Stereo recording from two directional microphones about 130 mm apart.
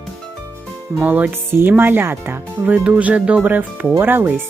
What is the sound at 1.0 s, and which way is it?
Speech, 10° right (ahead or behind).